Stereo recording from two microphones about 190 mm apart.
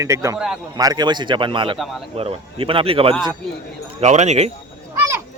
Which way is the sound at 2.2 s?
30° right (ahead or behind).